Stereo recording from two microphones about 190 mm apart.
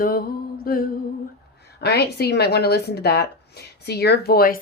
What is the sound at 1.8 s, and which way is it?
Speech, 60° left (ahead or behind).